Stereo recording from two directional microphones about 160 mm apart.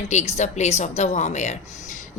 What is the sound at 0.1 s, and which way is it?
A woman's voice, 45° left (ahead or behind).